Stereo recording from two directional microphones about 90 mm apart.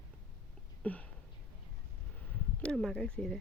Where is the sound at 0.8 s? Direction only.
15° left (ahead or behind).